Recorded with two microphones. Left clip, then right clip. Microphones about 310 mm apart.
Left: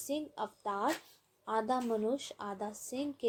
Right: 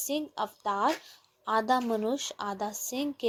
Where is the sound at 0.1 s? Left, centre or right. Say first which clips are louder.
Right 5 dB; right.